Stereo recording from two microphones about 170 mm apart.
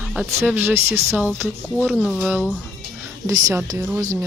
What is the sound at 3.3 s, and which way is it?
Speech, 20° right (ahead or behind).